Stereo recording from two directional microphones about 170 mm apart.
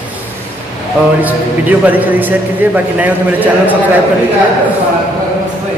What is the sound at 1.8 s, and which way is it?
A man's voice, 10° right (ahead or behind).